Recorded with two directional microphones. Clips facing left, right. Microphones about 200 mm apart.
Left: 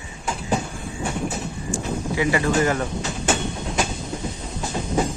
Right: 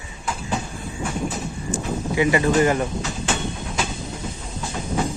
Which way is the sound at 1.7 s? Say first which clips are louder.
Right 2 dB; 20° right (ahead or behind).